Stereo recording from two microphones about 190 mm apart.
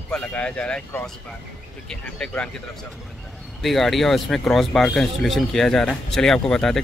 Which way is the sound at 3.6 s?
Centre (ahead or behind).